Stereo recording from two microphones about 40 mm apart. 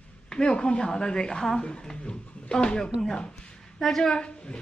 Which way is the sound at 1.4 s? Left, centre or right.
Centre.